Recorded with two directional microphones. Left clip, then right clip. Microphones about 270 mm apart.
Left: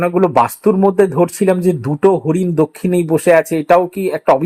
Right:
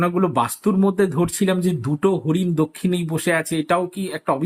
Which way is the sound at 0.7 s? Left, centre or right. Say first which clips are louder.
Left 8 dB; left.